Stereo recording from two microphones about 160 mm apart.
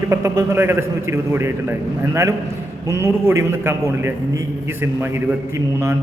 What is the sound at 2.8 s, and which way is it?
A man's voice, 15° right (ahead or behind).